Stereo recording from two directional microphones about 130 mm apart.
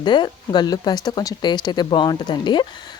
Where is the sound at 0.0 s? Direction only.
35° left (ahead or behind).